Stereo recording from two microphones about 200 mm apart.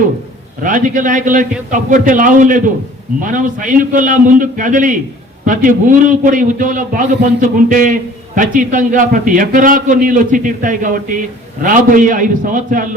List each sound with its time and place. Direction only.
0.6 s a man's voice: 40° right (ahead or behind)